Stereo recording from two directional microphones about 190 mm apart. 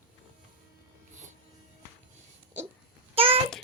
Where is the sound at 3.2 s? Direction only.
30° right (ahead or behind).